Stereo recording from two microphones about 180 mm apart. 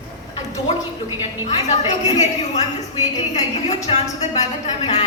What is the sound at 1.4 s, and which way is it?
A woman's voice, 40° left (ahead or behind).